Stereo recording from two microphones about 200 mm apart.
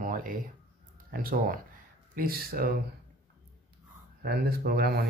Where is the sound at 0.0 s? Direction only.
45° right (ahead or behind).